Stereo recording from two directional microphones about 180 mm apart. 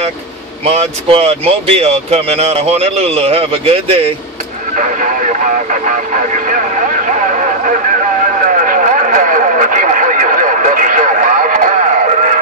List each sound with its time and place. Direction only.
0.7 s speech: 35° right (ahead or behind)
5.0 s speech: 45° right (ahead or behind)
7.1 s vehicle: 45° right (ahead or behind)
8.5 s radio: 50° right (ahead or behind)